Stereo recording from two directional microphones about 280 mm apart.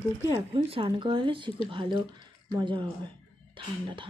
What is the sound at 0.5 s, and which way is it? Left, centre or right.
Speech, centre.